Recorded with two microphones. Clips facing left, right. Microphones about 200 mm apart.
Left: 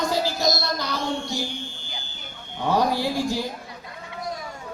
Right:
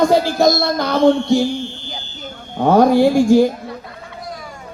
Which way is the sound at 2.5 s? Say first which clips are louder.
Right 11 dB; 50° right (ahead or behind).